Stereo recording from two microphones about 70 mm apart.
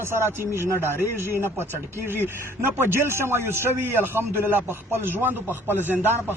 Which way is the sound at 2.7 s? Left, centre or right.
Right.